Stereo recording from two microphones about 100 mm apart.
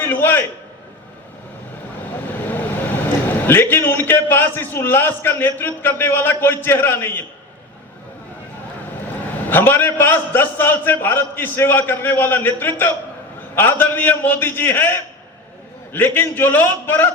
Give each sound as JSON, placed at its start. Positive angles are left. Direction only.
{"t": 0.0, "sound": "a sound", "side_deg": 20}
{"t": 2.1, "sound": "a man's voice", "side_deg": 20}
{"t": 9.5, "sound": "a man's voice", "side_deg": 20}